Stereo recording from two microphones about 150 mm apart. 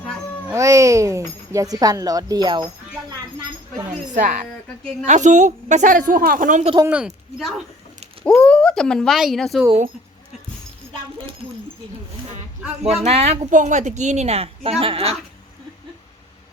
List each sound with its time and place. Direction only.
0.4 s speech: 20° right (ahead or behind)
4.1 s a woman's voice: 55° right (ahead or behind)
6.8 s speech: 5° right (ahead or behind)
8.2 s speech: 10° left (ahead or behind)
12.8 s speech: 45° right (ahead or behind)